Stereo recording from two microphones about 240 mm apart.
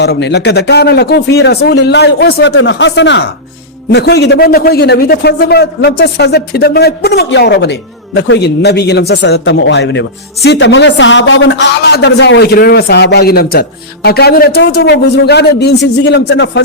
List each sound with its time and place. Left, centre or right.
0.0 s a man's voice: left